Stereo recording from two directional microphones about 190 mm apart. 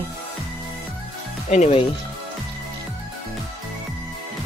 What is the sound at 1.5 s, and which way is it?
Speech, 35° left (ahead or behind).